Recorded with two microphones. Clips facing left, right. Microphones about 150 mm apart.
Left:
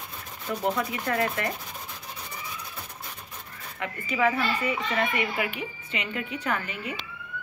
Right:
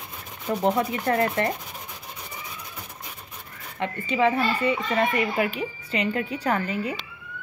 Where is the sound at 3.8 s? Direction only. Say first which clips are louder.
Right 4 dB; 30° right (ahead or behind).